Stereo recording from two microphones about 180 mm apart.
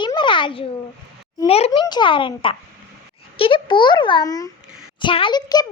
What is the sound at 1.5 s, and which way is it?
A child's voice, 35° left (ahead or behind).